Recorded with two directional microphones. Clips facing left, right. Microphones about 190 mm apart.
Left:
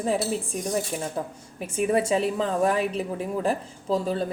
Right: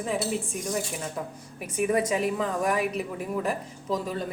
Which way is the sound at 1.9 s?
30° left (ahead or behind).